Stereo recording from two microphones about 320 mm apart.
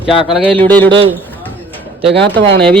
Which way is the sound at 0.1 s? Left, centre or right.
Centre.